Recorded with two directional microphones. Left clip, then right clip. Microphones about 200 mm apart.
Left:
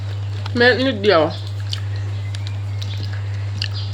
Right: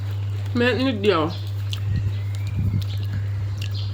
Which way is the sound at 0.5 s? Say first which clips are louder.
Left 6 dB; 20° right (ahead or behind).